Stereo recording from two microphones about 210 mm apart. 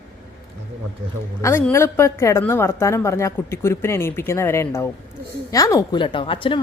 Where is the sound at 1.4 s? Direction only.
10° left (ahead or behind).